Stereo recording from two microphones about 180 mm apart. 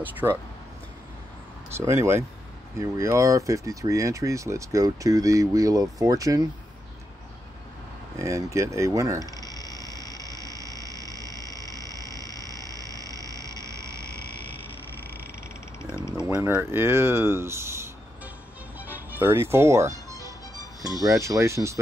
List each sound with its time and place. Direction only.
0.0 s speech: 10° right (ahead or behind)
1.7 s speech: 15° right (ahead or behind)
8.2 s speech: 15° right (ahead or behind)
9.4 s frog: 20° left (ahead or behind)
13.4 s frog: 15° right (ahead or behind)
15.8 s a sound: 15° left (ahead or behind)
16.3 s speech: 15° right (ahead or behind)
18.8 s music: 10° right (ahead or behind)
20.8 s speech: 20° right (ahead or behind)